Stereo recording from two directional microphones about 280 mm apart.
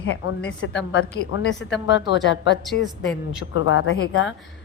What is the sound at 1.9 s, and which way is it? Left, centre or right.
Speech, left.